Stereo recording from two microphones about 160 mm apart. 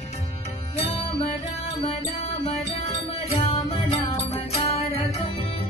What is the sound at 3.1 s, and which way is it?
Music, 40° left (ahead or behind).